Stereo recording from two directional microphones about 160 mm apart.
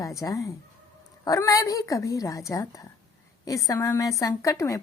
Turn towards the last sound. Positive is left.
turn(degrees=20)  # may be behind; listen again after turning